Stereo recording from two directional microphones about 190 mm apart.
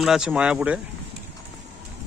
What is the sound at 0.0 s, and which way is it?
Speech, centre (ahead or behind).